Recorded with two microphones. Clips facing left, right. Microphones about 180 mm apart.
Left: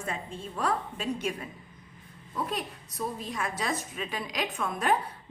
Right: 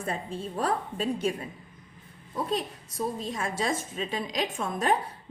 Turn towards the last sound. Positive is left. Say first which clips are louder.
# right 1 dB
turn(degrees=-30)  # may be behind; listen again after turning